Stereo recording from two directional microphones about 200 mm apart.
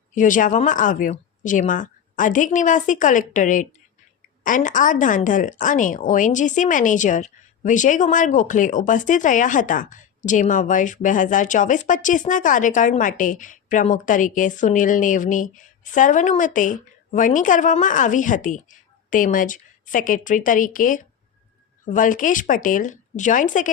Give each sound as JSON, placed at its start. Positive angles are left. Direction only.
{"t": 0.1, "sound": "speech", "side_deg": 40}